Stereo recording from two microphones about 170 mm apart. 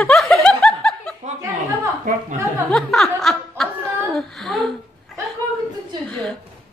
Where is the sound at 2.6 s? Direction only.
Centre (ahead or behind).